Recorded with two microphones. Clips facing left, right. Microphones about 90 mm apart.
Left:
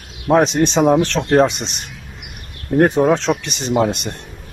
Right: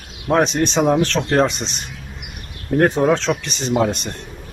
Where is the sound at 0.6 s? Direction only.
15° left (ahead or behind).